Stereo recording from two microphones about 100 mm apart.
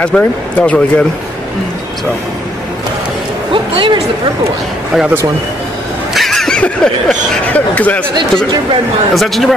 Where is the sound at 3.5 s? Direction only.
60° right (ahead or behind).